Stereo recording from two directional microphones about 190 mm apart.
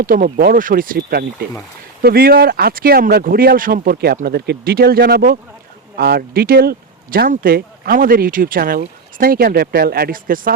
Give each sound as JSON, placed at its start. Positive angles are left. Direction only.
{"t": 0.0, "sound": "speech", "side_deg": -45}